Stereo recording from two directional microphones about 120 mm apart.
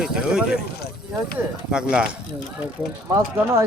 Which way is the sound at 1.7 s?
5° right (ahead or behind).